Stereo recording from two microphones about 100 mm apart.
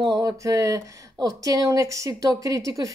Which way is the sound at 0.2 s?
35° right (ahead or behind).